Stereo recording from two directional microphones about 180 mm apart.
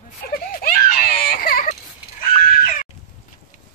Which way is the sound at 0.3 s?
55° left (ahead or behind).